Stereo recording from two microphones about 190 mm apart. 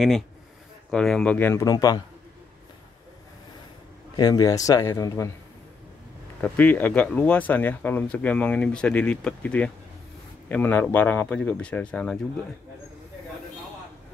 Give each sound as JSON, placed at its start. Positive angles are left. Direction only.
{"t": 0.8, "sound": "speech", "side_deg": 5}
{"t": 4.2, "sound": "speech", "side_deg": 20}
{"t": 6.4, "sound": "speech", "side_deg": 10}